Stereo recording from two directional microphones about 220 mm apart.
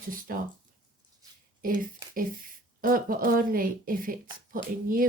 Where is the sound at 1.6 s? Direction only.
40° right (ahead or behind).